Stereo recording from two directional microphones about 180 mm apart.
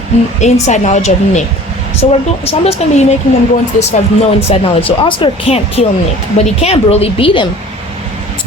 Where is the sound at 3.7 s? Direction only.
45° left (ahead or behind).